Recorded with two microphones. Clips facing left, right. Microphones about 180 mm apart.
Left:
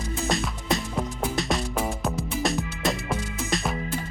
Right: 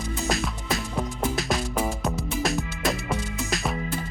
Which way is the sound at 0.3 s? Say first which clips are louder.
Left 2 dB; centre (ahead or behind).